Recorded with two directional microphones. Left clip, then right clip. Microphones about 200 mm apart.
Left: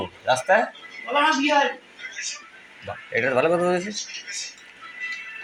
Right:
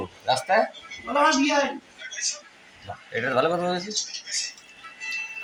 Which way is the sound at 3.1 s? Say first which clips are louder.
Left 3 dB; 5° right (ahead or behind).